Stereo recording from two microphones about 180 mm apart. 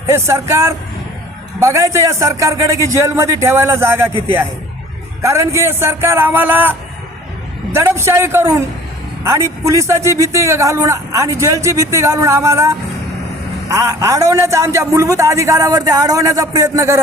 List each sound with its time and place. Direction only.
0.1 s a man's voice: 15° right (ahead or behind)
5.2 s a man's voice: 15° right (ahead or behind)